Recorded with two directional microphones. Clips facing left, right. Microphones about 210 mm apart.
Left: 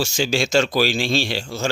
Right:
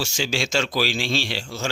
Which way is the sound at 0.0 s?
40° left (ahead or behind).